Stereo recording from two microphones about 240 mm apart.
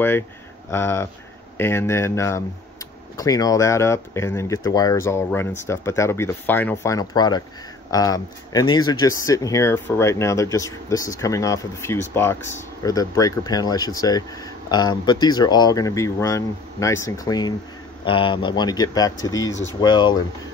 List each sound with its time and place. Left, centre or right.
0.7 s speech: centre